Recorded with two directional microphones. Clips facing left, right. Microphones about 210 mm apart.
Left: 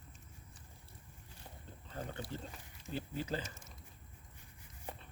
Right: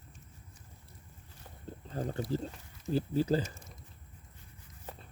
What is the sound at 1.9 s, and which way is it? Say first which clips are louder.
Speech: right 9 dB; 35° right (ahead or behind).